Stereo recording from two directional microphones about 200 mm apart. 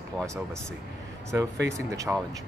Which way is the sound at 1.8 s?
15° right (ahead or behind).